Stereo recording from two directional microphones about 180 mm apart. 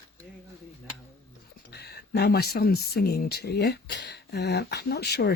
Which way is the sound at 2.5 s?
60° left (ahead or behind).